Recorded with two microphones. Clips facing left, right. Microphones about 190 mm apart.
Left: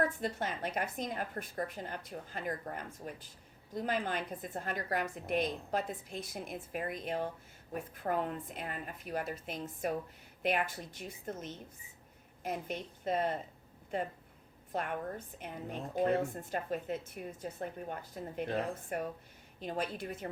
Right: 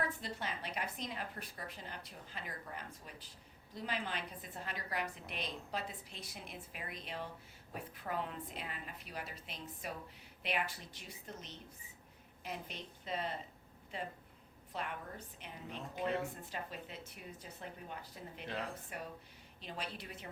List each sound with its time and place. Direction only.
0.2 s a woman's voice: 50° left (ahead or behind)